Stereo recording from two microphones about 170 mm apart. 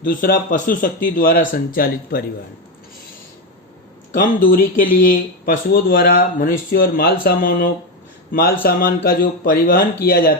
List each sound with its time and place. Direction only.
0.0 s speech: 55° left (ahead or behind)
4.1 s speech: 55° left (ahead or behind)